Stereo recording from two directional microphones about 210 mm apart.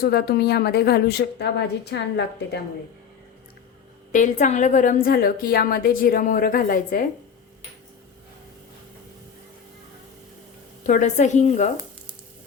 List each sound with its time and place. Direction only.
0.0 s a woman's voice: 50° left (ahead or behind)
4.1 s a woman's voice: 35° left (ahead or behind)
10.8 s a woman's voice: 35° left (ahead or behind)